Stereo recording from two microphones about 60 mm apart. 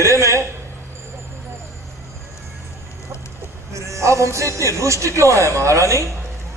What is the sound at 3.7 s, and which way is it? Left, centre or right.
A man's voice, right.